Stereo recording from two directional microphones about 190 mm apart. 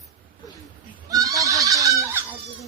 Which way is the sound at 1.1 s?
20° right (ahead or behind).